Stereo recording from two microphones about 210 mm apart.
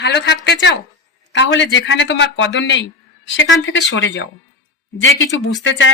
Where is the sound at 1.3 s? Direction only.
60° left (ahead or behind).